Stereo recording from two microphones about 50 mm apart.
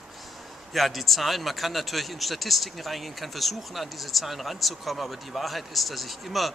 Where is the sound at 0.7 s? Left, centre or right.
Centre.